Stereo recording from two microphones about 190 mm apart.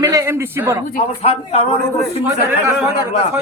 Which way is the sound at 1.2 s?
30° left (ahead or behind).